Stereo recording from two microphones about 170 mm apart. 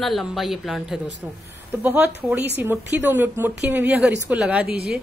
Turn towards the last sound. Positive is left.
turn(degrees=-65)  # may be behind; listen again after turning